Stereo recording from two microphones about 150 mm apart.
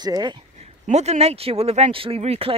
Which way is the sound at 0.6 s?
45° right (ahead or behind).